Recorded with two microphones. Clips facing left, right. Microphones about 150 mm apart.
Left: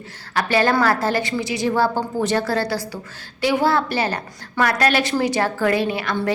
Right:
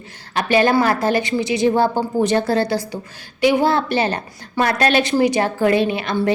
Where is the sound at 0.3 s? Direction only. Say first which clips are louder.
Right 3 dB; 20° right (ahead or behind).